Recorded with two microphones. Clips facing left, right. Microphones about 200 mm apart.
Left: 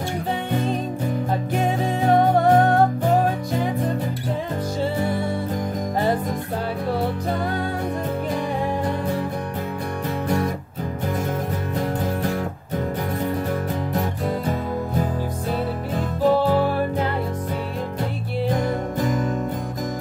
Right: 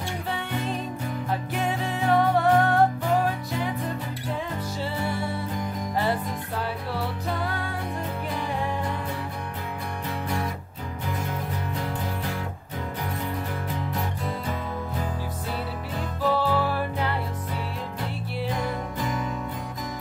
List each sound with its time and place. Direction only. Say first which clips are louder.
1.5 s music: left 7 dB; 45° left (ahead or behind)
4.9 s music: left 6 dB; 45° left (ahead or behind)
10.2 s music: left 7 dB; 45° left (ahead or behind)
13.9 s music: left 7 dB; 45° left (ahead or behind)
16.2 s music: left 6 dB; 45° left (ahead or behind)
18.5 s music: left 7 dB; 45° left (ahead or behind)